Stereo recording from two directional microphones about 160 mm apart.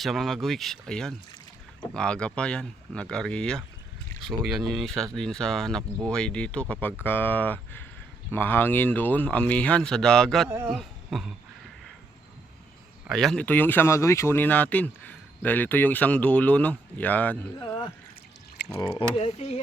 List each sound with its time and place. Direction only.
0.0 s speech: centre (ahead or behind)
13.1 s speech: centre (ahead or behind)
18.7 s speech: 30° left (ahead or behind)